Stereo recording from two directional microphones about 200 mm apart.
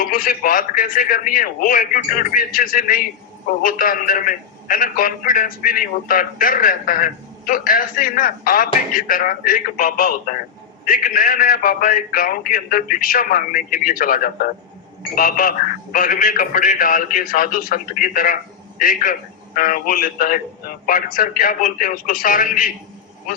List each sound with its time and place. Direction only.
0.0 s a man's voice: 45° left (ahead or behind)